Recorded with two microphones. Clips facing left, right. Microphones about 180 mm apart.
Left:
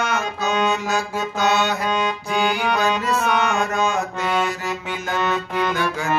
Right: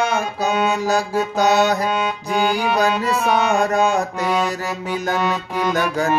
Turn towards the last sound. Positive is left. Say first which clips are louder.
# right 1 dB
turn(degrees=-10)  # may be behind; listen again after turning